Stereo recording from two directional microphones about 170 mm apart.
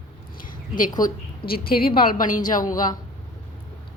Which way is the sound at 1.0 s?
55° left (ahead or behind).